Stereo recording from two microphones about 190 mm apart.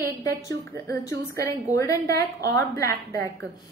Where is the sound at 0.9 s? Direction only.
15° left (ahead or behind).